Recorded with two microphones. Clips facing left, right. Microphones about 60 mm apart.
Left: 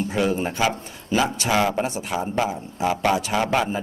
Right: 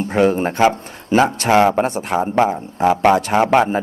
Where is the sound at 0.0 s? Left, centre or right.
Right.